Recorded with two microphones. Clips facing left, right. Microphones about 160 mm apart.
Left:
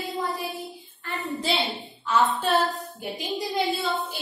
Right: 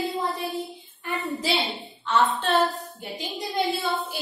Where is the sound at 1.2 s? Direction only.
Centre (ahead or behind).